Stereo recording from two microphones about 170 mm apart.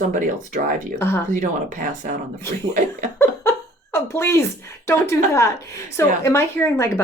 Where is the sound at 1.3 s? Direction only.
50° right (ahead or behind).